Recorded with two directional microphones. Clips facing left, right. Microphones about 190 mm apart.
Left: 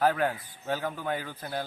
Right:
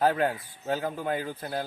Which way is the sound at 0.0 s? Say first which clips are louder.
Right 1 dB; 25° right (ahead or behind).